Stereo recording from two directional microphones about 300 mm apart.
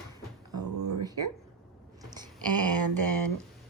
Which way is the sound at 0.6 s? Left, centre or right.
Right.